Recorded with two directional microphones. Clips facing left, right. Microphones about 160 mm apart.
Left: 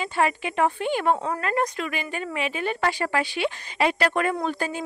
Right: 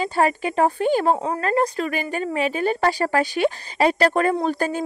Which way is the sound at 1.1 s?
25° right (ahead or behind).